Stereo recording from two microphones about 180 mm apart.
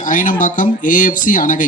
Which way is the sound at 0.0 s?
45° left (ahead or behind).